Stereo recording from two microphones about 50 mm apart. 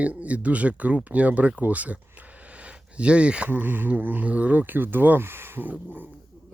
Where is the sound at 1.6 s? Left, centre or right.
Right.